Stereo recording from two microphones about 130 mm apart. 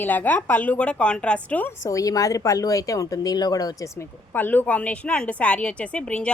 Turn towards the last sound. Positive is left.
turn(degrees=10)  # may be behind; listen again after turning